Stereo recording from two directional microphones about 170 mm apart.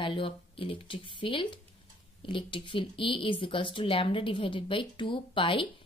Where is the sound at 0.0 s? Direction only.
30° left (ahead or behind).